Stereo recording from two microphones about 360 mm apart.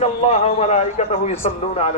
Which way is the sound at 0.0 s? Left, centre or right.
Centre.